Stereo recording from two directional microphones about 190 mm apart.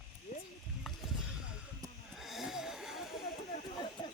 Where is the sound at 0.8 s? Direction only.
Centre (ahead or behind).